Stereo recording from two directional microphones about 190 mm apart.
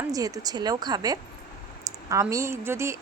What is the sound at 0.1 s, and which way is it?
A woman's voice, 20° right (ahead or behind).